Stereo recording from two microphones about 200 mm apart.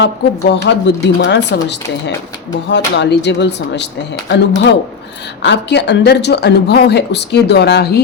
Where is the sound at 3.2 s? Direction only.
60° left (ahead or behind).